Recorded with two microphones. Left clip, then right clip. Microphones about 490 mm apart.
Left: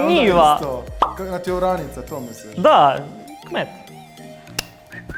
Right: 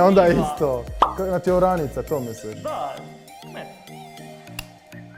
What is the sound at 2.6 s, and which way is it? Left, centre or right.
Speech, left.